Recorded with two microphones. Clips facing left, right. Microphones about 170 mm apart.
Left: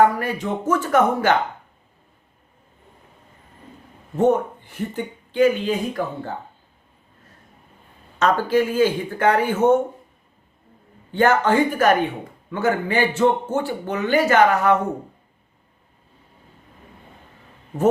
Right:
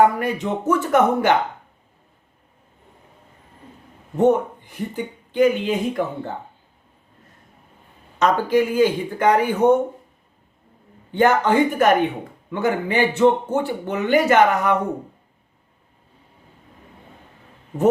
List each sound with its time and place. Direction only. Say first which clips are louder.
0.2 s speech: right 2 dB; 20° right (ahead or behind)
4.2 s speech: right 1 dB; 15° right (ahead or behind)
8.2 s speech: right 1 dB; 15° right (ahead or behind)
11.1 s speech: right 1 dB; 15° right (ahead or behind)